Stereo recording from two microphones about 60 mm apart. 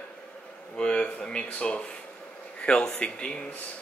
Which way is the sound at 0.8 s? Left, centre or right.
Centre.